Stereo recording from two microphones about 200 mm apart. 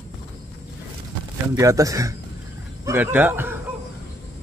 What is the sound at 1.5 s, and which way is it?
A man's voice, 15° right (ahead or behind).